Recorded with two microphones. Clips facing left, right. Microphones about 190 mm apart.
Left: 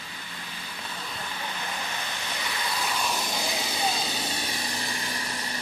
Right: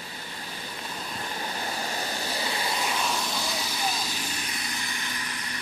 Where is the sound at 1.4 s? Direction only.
40° right (ahead or behind).